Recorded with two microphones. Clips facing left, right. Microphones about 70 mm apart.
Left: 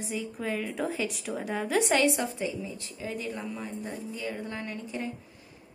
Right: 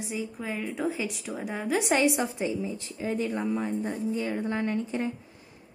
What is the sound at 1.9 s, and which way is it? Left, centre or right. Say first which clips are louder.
A woman's voice: right 1 dB; centre.